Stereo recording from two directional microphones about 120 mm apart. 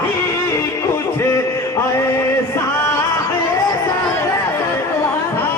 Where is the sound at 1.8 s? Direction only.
25° left (ahead or behind).